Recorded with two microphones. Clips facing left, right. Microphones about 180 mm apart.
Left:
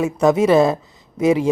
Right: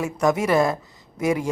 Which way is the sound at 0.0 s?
20° left (ahead or behind).